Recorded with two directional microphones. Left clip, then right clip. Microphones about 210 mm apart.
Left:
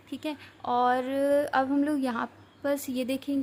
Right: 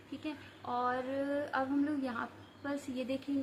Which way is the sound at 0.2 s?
55° left (ahead or behind).